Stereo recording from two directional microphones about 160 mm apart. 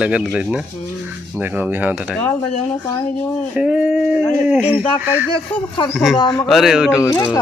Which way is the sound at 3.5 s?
5° right (ahead or behind).